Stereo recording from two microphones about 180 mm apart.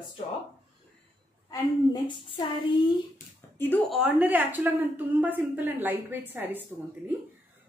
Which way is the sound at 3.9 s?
5° right (ahead or behind).